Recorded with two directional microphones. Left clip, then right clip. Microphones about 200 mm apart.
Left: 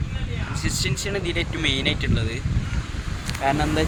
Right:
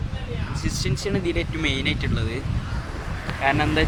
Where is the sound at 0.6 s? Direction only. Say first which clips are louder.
Left 1 dB; 10° left (ahead or behind).